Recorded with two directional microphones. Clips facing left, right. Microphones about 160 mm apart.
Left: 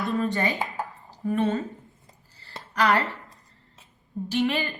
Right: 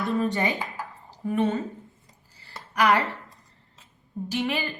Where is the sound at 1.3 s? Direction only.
15° right (ahead or behind).